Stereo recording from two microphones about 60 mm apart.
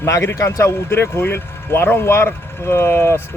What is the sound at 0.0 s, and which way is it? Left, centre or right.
Speech, left.